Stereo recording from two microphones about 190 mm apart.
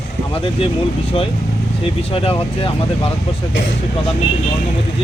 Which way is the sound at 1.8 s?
30° left (ahead or behind).